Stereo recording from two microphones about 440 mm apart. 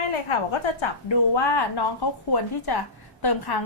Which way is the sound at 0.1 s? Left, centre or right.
Left.